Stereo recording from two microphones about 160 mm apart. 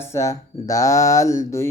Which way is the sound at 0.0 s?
20° left (ahead or behind).